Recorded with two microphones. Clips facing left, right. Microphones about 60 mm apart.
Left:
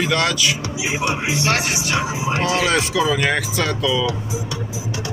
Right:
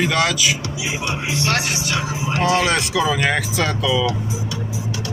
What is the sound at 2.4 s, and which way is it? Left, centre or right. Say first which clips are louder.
Speech: right 2 dB; centre.